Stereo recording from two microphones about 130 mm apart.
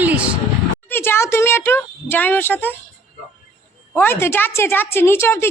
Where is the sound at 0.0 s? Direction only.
10° right (ahead or behind).